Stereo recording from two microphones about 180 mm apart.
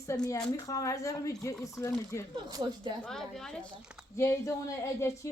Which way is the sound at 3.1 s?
Centre (ahead or behind).